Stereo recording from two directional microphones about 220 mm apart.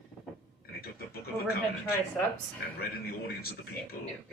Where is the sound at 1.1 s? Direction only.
45° left (ahead or behind).